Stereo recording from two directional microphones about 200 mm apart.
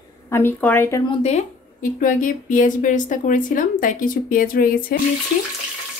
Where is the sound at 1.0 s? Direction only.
35° left (ahead or behind).